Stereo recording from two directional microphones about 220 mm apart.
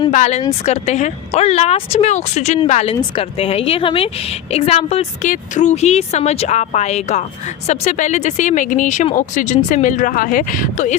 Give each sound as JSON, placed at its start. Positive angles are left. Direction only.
{"t": 0.1, "sound": "speech", "side_deg": 35}